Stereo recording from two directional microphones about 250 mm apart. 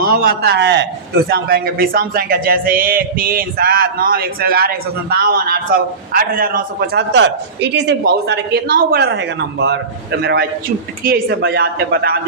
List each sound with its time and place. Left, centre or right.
0.0 s a man's voice: right